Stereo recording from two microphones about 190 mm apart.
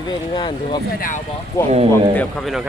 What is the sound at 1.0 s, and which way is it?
Speech, 45° left (ahead or behind).